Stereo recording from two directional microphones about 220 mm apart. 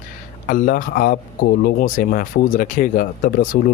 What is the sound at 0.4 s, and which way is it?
Speech, 35° left (ahead or behind).